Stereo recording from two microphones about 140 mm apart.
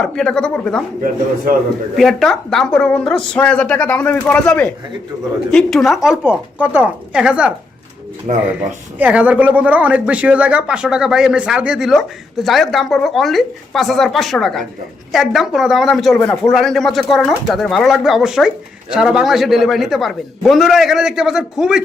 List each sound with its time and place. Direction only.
0.0 s speech: 5° left (ahead or behind)
2.0 s a woman's voice: centre (ahead or behind)
8.3 s speech: 55° right (ahead or behind)
9.0 s speech: 10° right (ahead or behind)